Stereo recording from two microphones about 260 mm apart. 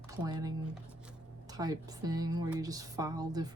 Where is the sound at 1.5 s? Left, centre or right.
Centre.